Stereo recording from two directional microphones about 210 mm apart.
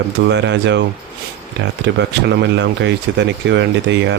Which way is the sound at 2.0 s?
55° right (ahead or behind).